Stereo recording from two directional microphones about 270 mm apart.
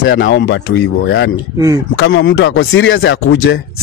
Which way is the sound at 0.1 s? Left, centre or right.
Left.